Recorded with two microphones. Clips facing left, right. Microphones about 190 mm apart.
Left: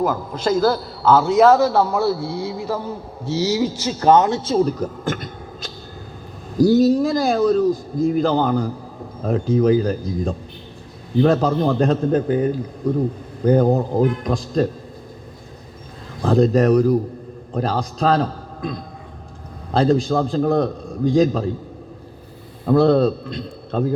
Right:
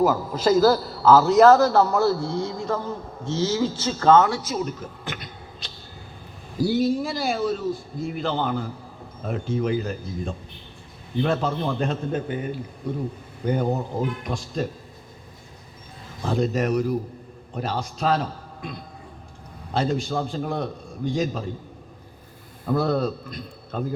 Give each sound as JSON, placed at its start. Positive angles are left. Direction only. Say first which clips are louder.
{"t": 0.0, "sound": "a man's voice", "louder": "right 1 dB", "side_deg": -5}
{"t": 16.2, "sound": "a man's voice", "louder": "left 8 dB", "side_deg": 40}
{"t": 19.7, "sound": "a man's voice", "louder": "left 8 dB", "side_deg": 35}
{"t": 22.8, "sound": "a man's voice", "louder": "left 9 dB", "side_deg": 25}